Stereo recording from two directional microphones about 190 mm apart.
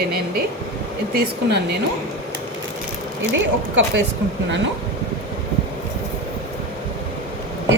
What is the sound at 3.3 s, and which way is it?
Speech, 75° right (ahead or behind).